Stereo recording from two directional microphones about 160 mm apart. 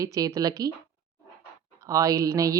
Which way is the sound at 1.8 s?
20° right (ahead or behind).